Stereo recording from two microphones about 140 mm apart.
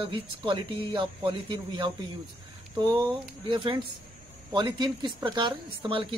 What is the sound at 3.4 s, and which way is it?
A woman's voice, 35° right (ahead or behind).